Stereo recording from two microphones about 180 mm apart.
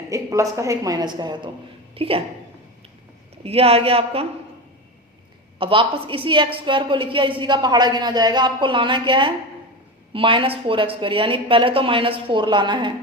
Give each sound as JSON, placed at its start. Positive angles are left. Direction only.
{"t": 0.1, "sound": "a woman's voice", "side_deg": -15}
{"t": 3.4, "sound": "a woman's voice", "side_deg": -35}
{"t": 5.5, "sound": "a woman's voice", "side_deg": -30}